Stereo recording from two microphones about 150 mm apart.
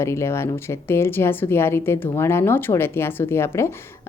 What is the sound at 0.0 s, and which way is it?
A woman's voice, 20° left (ahead or behind).